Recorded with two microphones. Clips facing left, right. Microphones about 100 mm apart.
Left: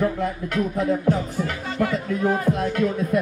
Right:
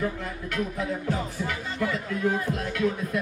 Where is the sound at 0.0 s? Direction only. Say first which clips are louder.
Left 7 dB; 45° left (ahead or behind).